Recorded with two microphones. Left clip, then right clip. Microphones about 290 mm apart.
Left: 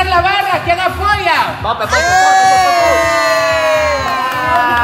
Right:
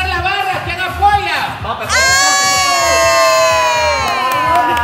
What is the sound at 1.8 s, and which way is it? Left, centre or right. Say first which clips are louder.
Speech: left 1 dB; centre.